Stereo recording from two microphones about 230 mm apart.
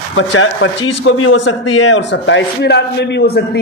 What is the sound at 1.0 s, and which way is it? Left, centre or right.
A man's voice, left.